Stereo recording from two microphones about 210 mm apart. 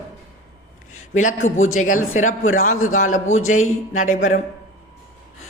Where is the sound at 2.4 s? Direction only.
75° left (ahead or behind).